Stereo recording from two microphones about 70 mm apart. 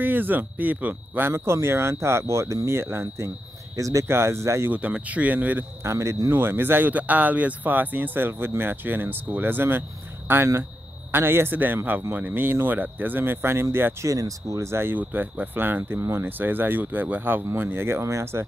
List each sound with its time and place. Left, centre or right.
0.0 s speech: right
1.3 s speech: right
3.7 s speech: right
4.6 s speech: centre
5.9 s speech: right
6.3 s speech: right
14.0 s speech: right